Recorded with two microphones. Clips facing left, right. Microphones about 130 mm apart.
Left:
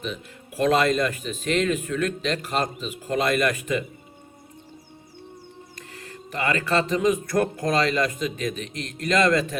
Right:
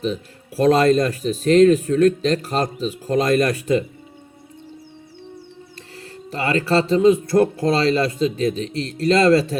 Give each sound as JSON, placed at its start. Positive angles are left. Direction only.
{"t": 0.0, "sound": "speech", "side_deg": -35}
{"t": 5.9, "sound": "speech", "side_deg": -30}